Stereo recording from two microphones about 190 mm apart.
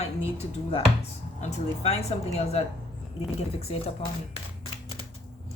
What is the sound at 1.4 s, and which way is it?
Speech, 30° left (ahead or behind).